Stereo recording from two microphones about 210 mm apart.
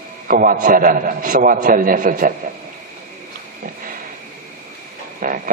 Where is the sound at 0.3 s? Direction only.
40° right (ahead or behind).